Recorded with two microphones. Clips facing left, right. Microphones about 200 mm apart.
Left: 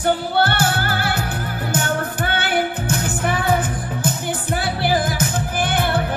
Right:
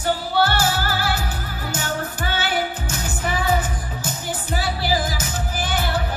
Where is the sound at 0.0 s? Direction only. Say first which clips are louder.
Left 2 dB; 55° left (ahead or behind).